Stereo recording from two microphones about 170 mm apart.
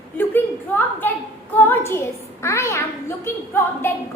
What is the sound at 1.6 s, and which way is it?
A child's voice, 15° left (ahead or behind).